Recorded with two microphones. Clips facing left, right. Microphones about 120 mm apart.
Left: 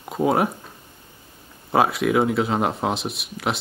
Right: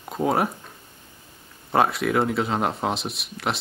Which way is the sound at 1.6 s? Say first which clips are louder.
Left 2 dB; centre (ahead or behind).